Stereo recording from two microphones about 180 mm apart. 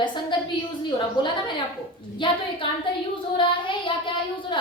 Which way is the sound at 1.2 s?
25° left (ahead or behind).